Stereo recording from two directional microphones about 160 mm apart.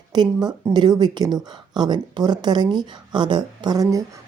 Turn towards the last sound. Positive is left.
turn(degrees=-25)  # may be behind; listen again after turning